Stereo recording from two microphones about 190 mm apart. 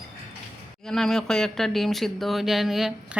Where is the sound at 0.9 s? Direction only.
Centre (ahead or behind).